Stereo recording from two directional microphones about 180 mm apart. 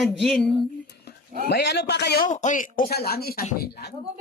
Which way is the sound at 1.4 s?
70° left (ahead or behind).